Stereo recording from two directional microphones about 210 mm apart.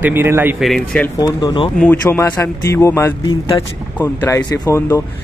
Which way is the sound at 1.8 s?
10° left (ahead or behind).